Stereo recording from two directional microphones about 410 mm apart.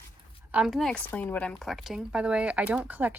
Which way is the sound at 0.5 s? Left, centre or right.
Centre.